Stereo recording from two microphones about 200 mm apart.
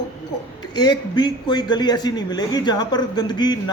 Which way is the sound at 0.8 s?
20° left (ahead or behind).